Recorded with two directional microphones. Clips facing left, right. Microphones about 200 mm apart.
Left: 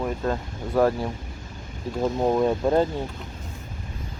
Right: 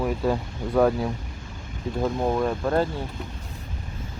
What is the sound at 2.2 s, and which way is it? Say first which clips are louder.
Speech: left 6 dB; 15° left (ahead or behind).